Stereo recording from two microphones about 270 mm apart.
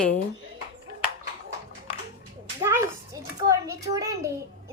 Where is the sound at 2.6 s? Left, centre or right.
Centre.